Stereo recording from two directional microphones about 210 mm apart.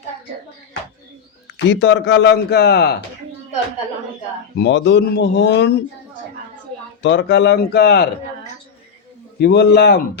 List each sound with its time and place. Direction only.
1.5 s speech: 60° left (ahead or behind)
4.5 s speech: 55° left (ahead or behind)
7.0 s speech: 55° left (ahead or behind)
9.4 s speech: 50° left (ahead or behind)